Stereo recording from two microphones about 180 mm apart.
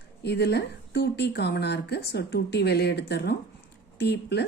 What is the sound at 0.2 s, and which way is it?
Speech, 70° left (ahead or behind).